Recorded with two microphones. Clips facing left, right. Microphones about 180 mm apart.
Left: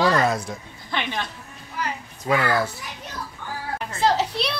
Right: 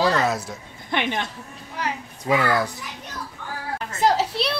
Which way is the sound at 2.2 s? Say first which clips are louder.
Right 1 dB; 10° right (ahead or behind).